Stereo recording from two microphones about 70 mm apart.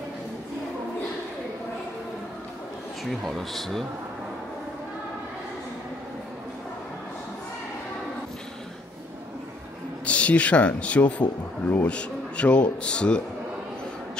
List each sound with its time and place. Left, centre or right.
3.1 s speech: centre
10.0 s a man's voice: centre